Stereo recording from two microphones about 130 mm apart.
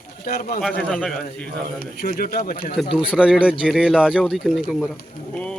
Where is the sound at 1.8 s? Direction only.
90° left.